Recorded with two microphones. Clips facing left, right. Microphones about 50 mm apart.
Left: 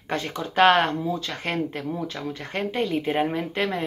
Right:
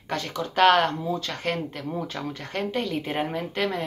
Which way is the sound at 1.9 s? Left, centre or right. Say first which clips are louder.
Left 1 dB; centre.